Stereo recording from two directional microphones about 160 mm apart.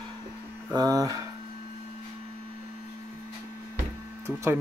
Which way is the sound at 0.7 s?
25° right (ahead or behind).